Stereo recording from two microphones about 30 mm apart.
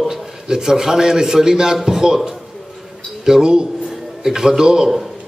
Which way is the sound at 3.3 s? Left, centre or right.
Centre.